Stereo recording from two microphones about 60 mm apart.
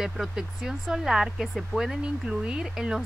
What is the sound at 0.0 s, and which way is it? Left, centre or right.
Speech, centre.